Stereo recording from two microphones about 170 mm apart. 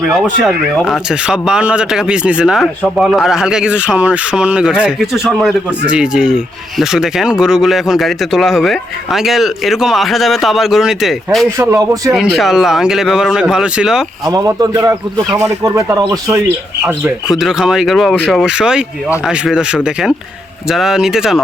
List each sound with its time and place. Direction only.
0.1 s speech: centre (ahead or behind)
11.5 s a man's voice: 15° right (ahead or behind)
12.1 s speech: centre (ahead or behind)
14.3 s a man's voice: 20° right (ahead or behind)
17.2 s speech: centre (ahead or behind)